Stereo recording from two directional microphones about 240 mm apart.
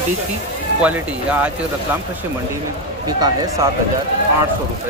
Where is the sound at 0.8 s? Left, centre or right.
Centre.